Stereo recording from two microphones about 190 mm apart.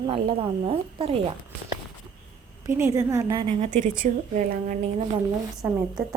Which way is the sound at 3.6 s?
40° right (ahead or behind).